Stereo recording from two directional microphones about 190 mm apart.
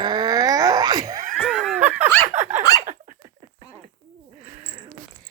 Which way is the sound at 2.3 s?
40° right (ahead or behind).